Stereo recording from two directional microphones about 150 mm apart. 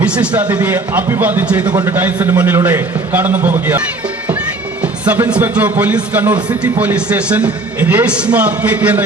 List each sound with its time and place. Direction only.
0.0 s a man's voice: 10° right (ahead or behind)
4.8 s a man's voice: 10° right (ahead or behind)